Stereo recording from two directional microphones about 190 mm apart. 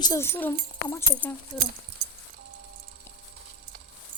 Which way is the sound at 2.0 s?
60° right (ahead or behind).